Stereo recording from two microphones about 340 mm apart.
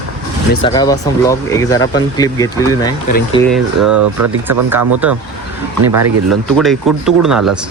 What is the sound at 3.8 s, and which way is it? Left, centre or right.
Speech, right.